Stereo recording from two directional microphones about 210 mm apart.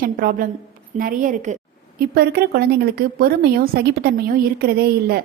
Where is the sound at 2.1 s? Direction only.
50° right (ahead or behind).